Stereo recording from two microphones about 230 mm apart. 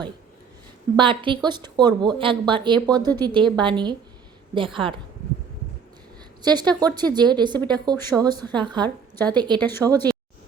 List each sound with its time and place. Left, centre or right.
0.9 s a woman's voice: right
6.4 s a woman's voice: centre
9.6 s speech: centre